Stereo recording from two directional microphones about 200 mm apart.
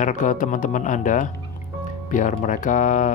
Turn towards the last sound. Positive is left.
turn(degrees=40)  # may be behind; listen again after turning